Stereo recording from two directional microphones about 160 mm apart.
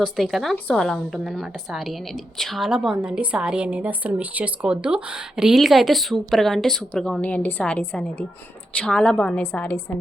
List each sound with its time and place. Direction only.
0.0 s a woman's voice: centre (ahead or behind)